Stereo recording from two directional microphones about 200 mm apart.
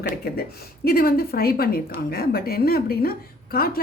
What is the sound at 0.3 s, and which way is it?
A woman's voice, 50° left (ahead or behind).